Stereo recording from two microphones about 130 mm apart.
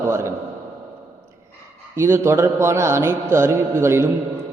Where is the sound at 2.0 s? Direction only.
20° right (ahead or behind).